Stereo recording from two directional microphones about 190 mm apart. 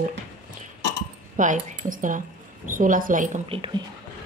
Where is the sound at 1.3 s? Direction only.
40° right (ahead or behind).